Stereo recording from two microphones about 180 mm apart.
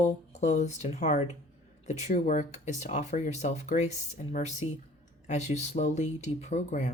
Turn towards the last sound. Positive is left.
turn(degrees=40)  # may be behind; listen again after turning